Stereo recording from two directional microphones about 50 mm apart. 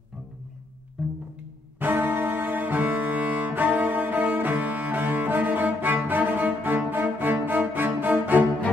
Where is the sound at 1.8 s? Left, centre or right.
Right.